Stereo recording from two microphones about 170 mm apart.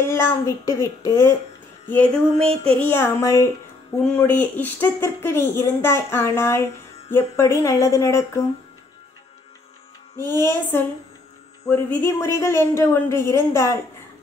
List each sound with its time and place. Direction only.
0.0 s speech: 15° left (ahead or behind)
4.0 s speech: 10° left (ahead or behind)
10.1 s speech: 15° left (ahead or behind)